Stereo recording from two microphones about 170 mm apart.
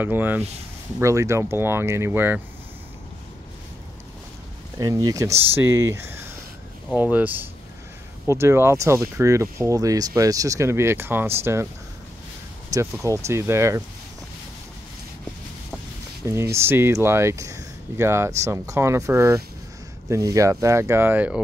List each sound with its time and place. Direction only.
0.0 s speech: 10° right (ahead or behind)
4.7 s speech: 20° right (ahead or behind)
12.7 s speech: 20° right (ahead or behind)
16.3 s speech: 15° right (ahead or behind)